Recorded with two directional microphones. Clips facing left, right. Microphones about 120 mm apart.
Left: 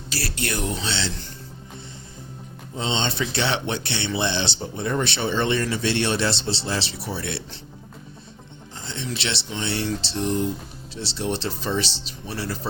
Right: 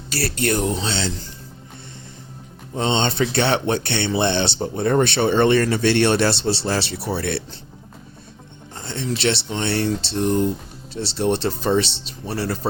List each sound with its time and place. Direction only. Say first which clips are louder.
0.3 s speech: right 8 dB; 45° right (ahead or behind)
0.6 s speech: right 5 dB; 30° right (ahead or behind)
0.9 s speech: right 3 dB; 45° right (ahead or behind)
2.7 s speech: right 5 dB; 55° right (ahead or behind)
8.7 s speech: right 5 dB; 55° right (ahead or behind)